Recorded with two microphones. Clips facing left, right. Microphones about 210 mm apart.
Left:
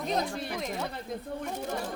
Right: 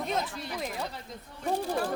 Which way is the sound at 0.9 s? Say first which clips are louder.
Left 8 dB; 55° left (ahead or behind).